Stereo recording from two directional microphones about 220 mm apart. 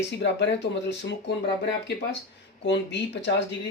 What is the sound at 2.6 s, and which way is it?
Speech, 50° left (ahead or behind).